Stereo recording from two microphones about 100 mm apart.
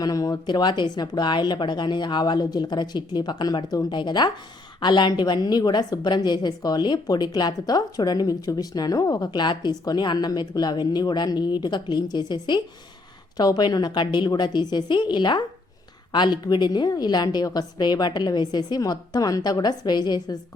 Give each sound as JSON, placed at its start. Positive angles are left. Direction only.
{"t": 0.0, "sound": "a woman's voice", "side_deg": 40}